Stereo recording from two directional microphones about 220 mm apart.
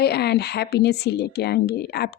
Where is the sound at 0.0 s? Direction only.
45° left (ahead or behind).